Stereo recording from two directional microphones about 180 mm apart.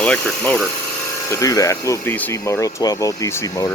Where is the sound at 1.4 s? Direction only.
20° left (ahead or behind).